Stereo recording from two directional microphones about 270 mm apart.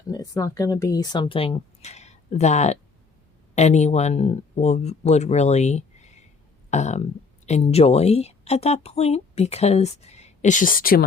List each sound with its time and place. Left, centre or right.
0.1 s speech: centre; by 11.0 s left